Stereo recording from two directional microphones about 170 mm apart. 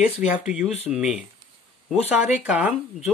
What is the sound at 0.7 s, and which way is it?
Speech, 40° left (ahead or behind).